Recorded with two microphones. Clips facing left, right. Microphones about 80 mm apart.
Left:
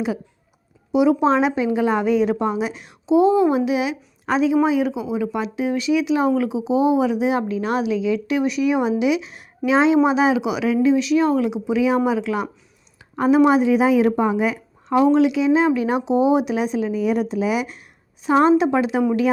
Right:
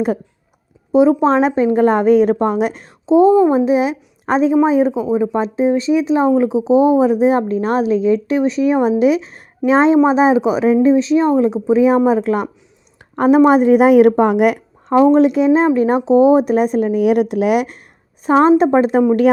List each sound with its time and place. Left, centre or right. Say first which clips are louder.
0.9 s speech: right 5 dB; right
2.8 s a child's voice: right 5 dB; right
14.9 s speech: right 5 dB; right
18.3 s speech: right 4 dB; right